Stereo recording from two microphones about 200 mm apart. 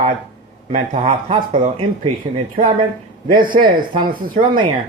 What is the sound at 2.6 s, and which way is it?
Speech, 25° right (ahead or behind).